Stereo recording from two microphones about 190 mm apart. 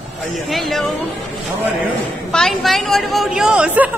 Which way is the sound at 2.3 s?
Centre (ahead or behind).